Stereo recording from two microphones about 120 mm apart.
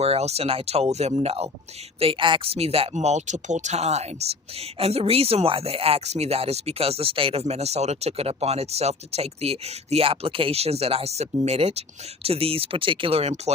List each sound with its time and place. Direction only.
0.0 s speech: 60° right (ahead or behind)
2.0 s speech: 45° right (ahead or behind); by 13.5 s 65° right (ahead or behind)